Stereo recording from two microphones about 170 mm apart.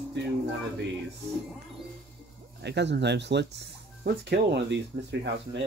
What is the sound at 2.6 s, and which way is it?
Speech, 90° right.